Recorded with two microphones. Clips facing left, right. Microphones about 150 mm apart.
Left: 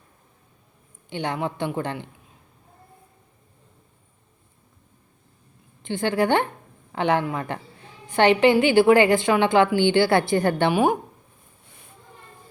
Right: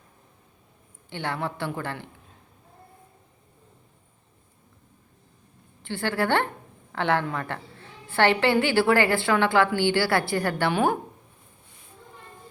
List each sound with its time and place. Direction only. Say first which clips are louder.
1.1 s speech: left 3 dB; 20° left (ahead or behind)
5.8 s a woman's voice: left 4 dB; 20° left (ahead or behind)